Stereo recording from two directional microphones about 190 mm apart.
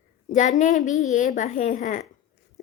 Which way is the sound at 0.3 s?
40° left (ahead or behind).